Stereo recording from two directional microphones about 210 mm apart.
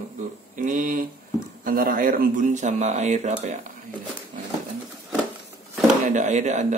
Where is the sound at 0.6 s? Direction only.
40° right (ahead or behind).